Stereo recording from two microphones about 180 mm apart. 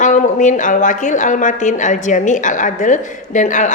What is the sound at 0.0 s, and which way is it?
A woman's voice, 45° left (ahead or behind).